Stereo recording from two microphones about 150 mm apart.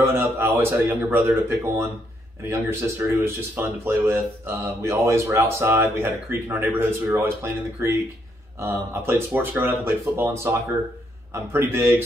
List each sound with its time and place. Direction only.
0.0 s speech: 15° right (ahead or behind)